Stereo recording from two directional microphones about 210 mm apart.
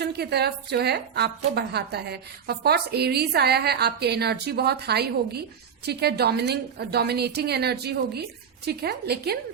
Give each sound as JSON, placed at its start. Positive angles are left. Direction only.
{"t": 0.0, "sound": "a woman's voice", "side_deg": -50}